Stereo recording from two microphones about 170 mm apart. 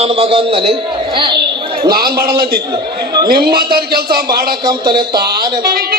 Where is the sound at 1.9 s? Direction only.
65° right (ahead or behind).